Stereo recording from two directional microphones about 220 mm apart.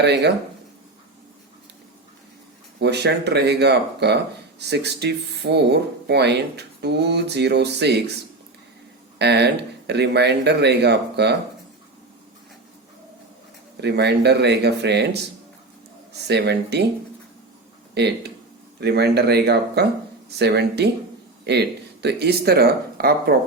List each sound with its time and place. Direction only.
0.0 s speech: 50° right (ahead or behind)
2.8 s speech: 50° right (ahead or behind)
9.1 s speech: 50° right (ahead or behind)
13.8 s speech: 50° right (ahead or behind)
16.2 s speech: 50° right (ahead or behind)
17.9 s speech: 50° right (ahead or behind)
22.0 s speech: 50° right (ahead or behind)